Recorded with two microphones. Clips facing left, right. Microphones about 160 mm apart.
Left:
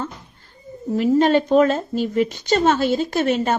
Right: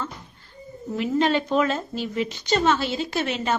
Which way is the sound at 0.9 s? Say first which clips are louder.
Left 6 dB; 40° left (ahead or behind).